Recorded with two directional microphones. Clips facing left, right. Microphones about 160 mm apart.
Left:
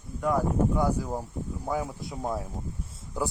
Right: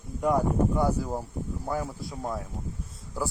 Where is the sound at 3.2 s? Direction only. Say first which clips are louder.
Left 1 dB; 20° left (ahead or behind).